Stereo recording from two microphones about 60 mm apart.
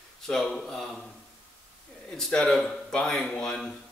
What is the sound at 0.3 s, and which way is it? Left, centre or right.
Speech, centre.